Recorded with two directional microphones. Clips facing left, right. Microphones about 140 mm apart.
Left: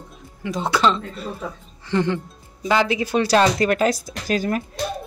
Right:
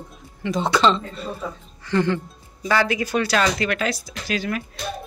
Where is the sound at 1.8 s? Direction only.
20° left (ahead or behind); by 4.8 s 40° left (ahead or behind).